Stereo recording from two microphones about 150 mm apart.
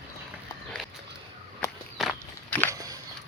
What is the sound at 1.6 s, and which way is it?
Walk, 15° left (ahead or behind).